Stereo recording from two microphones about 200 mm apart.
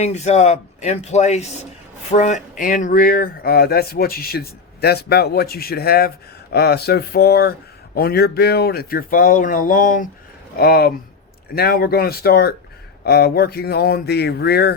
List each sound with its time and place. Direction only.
0.0 s speech: 35° left (ahead or behind); by 14.7 s 55° left (ahead or behind)